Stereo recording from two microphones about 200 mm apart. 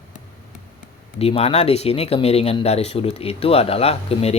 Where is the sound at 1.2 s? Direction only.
30° left (ahead or behind).